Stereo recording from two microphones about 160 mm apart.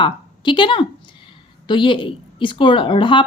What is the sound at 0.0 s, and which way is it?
A woman's voice, 30° left (ahead or behind).